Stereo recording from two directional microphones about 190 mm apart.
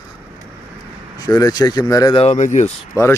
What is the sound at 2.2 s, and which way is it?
Speech, 40° left (ahead or behind).